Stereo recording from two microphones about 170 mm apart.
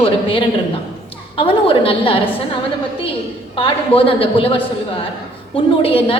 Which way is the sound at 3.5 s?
30° left (ahead or behind).